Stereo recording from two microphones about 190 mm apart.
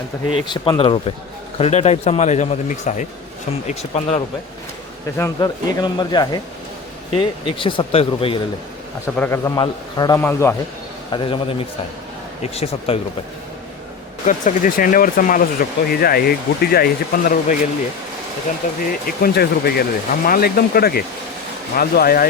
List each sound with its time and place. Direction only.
0.3 s speech: 25° left (ahead or behind)
5.1 s speech: 15° left (ahead or behind)
9.1 s a man's voice: 10° left (ahead or behind)
11.1 s speech: 25° left (ahead or behind)
12.4 s speech: 35° left (ahead or behind)
14.3 s speech: 45° left (ahead or behind)
18.8 s speech: 50° left (ahead or behind)